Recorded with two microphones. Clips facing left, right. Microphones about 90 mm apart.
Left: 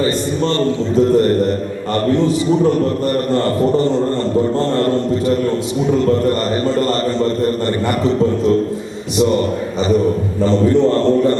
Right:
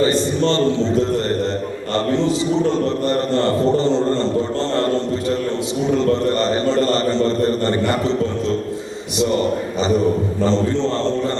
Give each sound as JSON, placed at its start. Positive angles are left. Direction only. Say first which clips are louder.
{"t": 3.1, "sound": "a man's voice", "louder": "left 1 dB", "side_deg": -25}
{"t": 10.4, "sound": "a man's voice", "louder": "left 6 dB", "side_deg": -25}